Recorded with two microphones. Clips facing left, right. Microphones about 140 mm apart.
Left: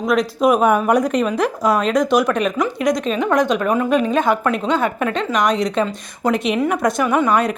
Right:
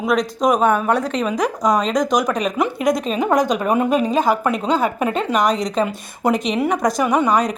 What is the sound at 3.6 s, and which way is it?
Speech, 20° right (ahead or behind).